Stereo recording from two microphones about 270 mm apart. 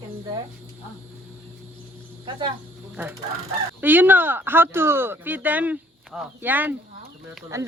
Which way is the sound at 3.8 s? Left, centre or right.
Centre.